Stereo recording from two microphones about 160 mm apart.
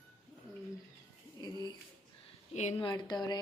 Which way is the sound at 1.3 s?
25° left (ahead or behind).